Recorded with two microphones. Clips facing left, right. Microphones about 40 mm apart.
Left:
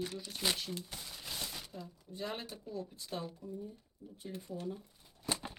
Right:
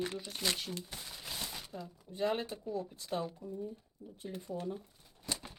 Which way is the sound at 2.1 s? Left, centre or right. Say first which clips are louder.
Right 7 dB; centre.